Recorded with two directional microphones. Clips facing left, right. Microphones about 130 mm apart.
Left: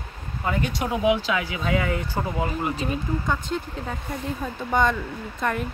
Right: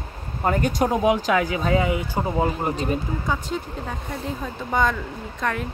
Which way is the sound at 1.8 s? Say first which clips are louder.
Right 3 dB; 20° right (ahead or behind).